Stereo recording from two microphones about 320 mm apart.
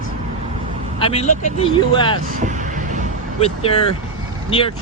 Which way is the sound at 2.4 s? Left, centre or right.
Right.